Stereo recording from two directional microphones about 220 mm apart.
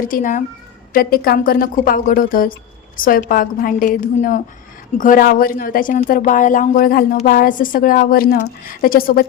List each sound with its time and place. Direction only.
0.0 s a woman's voice: 40° left (ahead or behind)